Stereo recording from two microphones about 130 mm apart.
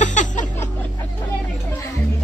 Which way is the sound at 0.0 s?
70° left (ahead or behind).